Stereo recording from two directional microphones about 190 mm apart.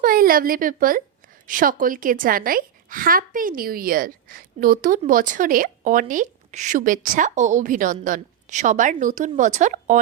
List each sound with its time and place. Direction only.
0.0 s a woman's voice: 50° right (ahead or behind)